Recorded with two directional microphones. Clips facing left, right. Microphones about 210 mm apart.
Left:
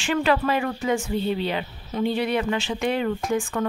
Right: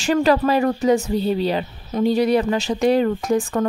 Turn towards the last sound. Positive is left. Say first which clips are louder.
# right 5 dB
turn(degrees=-40)  # may be behind; listen again after turning